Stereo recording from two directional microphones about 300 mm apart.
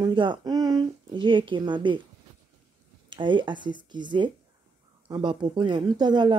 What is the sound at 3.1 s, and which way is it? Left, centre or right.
Speech, centre.